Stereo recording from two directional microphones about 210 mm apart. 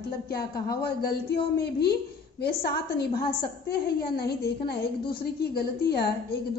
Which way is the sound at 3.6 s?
50° left (ahead or behind).